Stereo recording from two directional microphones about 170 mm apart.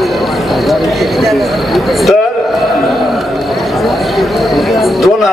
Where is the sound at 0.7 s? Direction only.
Centre (ahead or behind).